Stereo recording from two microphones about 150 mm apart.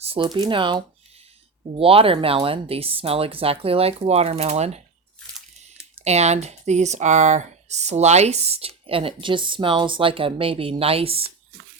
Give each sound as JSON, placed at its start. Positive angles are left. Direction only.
{"t": 0.0, "sound": "a sound", "side_deg": -40}
{"t": 0.3, "sound": "speech", "side_deg": -30}
{"t": 6.1, "sound": "speech", "side_deg": -45}